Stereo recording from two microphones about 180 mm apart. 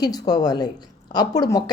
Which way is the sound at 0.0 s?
20° left (ahead or behind).